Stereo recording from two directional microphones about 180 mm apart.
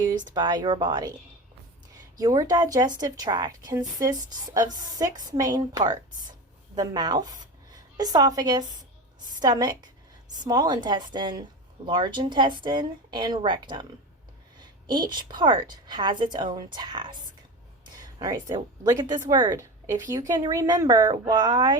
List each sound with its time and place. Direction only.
0.3 s a woman's voice: 25° right (ahead or behind)
2.1 s a woman's voice: 20° right (ahead or behind)
17.9 s a sound: 20° right (ahead or behind)
18.9 s a woman's voice: 20° right (ahead or behind)